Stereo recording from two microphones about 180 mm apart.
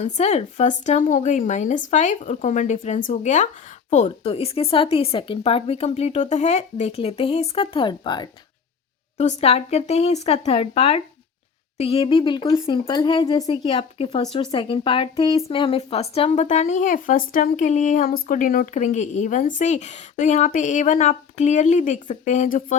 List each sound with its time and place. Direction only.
0.0 s a woman's voice: 35° left (ahead or behind)
9.4 s a woman's voice: 35° left (ahead or behind)